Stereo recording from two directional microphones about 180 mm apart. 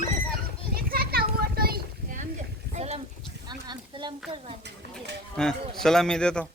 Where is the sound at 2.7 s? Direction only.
35° right (ahead or behind).